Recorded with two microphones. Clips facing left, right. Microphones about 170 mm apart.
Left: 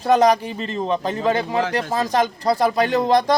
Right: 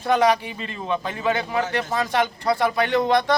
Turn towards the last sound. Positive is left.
turn(degrees=40)  # may be behind; listen again after turning